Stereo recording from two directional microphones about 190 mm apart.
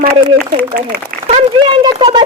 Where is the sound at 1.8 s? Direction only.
25° right (ahead or behind).